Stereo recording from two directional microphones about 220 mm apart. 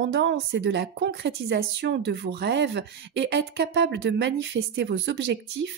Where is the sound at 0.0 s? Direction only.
55° right (ahead or behind).